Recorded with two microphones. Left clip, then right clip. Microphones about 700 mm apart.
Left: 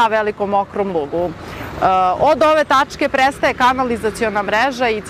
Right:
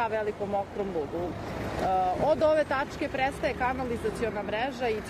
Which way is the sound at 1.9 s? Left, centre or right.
Left.